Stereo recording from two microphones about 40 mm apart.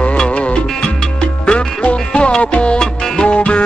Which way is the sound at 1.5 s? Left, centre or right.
Left.